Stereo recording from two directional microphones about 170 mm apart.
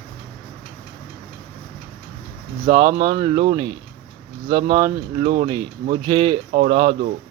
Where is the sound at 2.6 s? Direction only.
30° right (ahead or behind).